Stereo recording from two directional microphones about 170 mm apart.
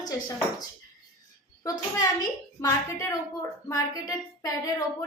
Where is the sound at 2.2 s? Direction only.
20° left (ahead or behind).